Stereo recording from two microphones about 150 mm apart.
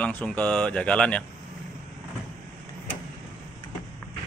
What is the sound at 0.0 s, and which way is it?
Speech, 10° left (ahead or behind).